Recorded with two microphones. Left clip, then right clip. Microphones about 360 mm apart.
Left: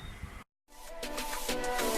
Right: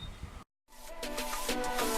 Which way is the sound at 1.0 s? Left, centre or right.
Centre.